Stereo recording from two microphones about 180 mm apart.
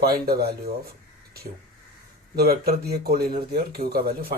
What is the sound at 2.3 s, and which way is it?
Speech, 60° right (ahead or behind).